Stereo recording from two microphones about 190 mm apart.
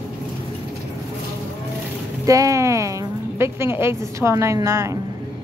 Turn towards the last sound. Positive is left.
turn(degrees=-15)  # may be behind; listen again after turning